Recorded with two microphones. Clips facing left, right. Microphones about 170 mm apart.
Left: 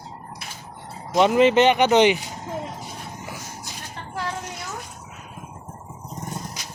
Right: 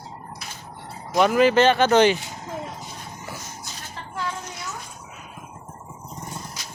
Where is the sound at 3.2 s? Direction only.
15° left (ahead or behind).